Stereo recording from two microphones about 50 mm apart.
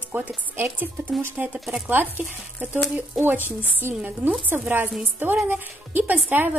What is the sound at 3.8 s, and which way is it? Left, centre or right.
Speech, right.